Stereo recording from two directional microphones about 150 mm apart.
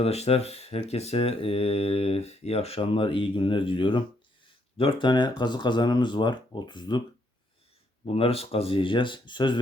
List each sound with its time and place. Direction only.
0.0 s speech: 45° left (ahead or behind)
8.0 s speech: 40° left (ahead or behind)